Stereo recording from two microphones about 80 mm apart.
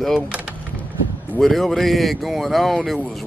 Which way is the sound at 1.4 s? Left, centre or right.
Centre.